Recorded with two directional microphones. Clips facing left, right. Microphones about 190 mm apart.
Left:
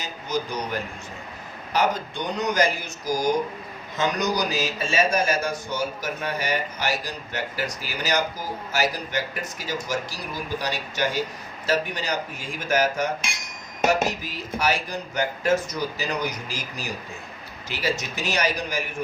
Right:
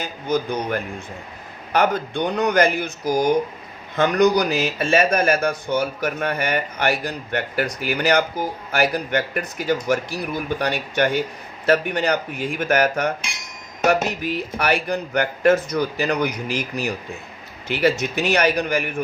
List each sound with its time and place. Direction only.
0.0 s speech: 55° right (ahead or behind)
14.3 s speech: 60° right (ahead or behind)